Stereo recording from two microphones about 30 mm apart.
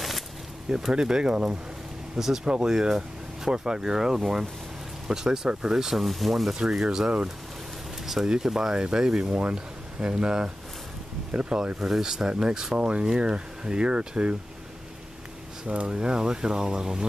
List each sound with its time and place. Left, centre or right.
0.9 s speech: right
2.1 s speech: centre
5.9 s speech: centre
6.5 s speech: right
9.2 s speech: right
11.8 s speech: centre
12.7 s speech: right
13.0 s speech: right
15.6 s speech: right
16.0 s speech: right